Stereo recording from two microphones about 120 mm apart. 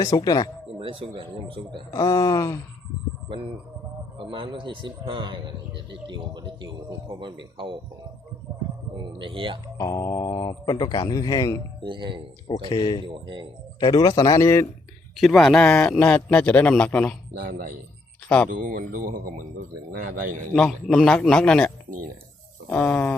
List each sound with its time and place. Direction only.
0.0 s speech: 35° left (ahead or behind)
0.8 s a man's voice: 50° right (ahead or behind)
1.9 s speech: 30° left (ahead or behind)
4.2 s a man's voice: 45° right (ahead or behind)
9.1 s a man's voice: 45° right (ahead or behind)
9.7 s speech: 25° left (ahead or behind)
11.8 s speech: 40° right (ahead or behind)
12.6 s speech: 40° left (ahead or behind); by 14.7 s 25° left (ahead or behind)
15.1 s a man's voice: 5° left (ahead or behind)
17.4 s speech: 90° right
20.6 s a man's voice: 5° left (ahead or behind)
22.7 s a man's voice: 15° left (ahead or behind)